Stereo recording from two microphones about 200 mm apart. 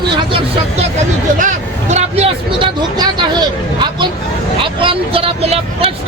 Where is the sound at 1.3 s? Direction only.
35° right (ahead or behind).